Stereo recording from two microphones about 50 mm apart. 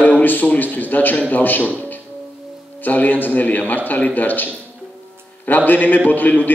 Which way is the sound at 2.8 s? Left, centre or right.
Left.